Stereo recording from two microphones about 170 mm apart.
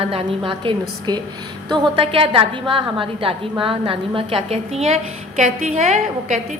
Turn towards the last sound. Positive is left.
turn(degrees=-45)  # may be behind; listen again after turning